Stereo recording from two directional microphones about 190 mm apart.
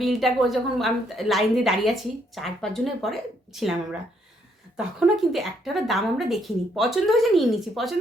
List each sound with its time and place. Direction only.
0.0 s a woman's voice: centre (ahead or behind)
4.8 s a woman's voice: 5° right (ahead or behind)